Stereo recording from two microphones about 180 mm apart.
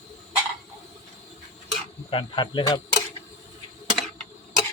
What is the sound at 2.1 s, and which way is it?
Speech, 25° left (ahead or behind).